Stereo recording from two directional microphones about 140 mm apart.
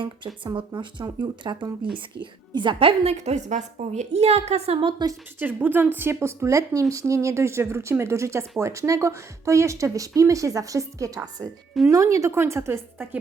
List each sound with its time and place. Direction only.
0.4 s a woman's voice: 35° right (ahead or behind)
5.4 s speech: 15° right (ahead or behind)